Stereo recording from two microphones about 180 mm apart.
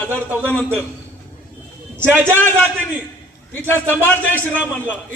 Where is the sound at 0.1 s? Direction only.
10° right (ahead or behind).